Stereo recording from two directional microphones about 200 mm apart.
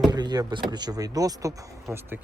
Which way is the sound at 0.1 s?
20° right (ahead or behind).